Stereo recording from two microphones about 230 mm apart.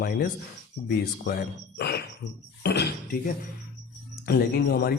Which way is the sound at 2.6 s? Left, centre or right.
Left.